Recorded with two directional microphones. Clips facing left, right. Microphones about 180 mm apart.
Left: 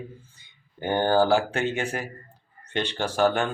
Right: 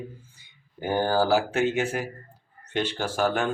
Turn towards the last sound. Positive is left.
turn(degrees=-5)  # may be behind; listen again after turning